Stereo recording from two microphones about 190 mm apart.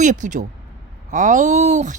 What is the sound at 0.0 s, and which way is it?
Speech, 40° right (ahead or behind).